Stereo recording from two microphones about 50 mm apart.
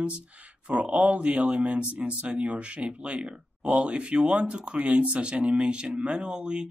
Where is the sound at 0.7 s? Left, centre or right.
Right.